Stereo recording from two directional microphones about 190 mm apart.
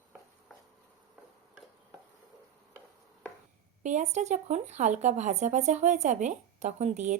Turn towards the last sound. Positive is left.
turn(degrees=-40)  # may be behind; listen again after turning